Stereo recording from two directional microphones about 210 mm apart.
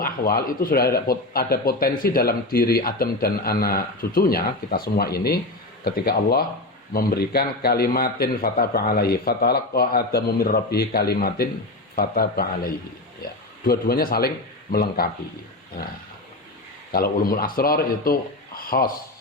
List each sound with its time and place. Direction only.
0.0 s speech: 45° left (ahead or behind)
16.9 s speech: 45° left (ahead or behind)